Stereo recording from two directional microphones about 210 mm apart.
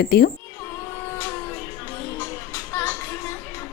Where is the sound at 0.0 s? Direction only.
45° left (ahead or behind).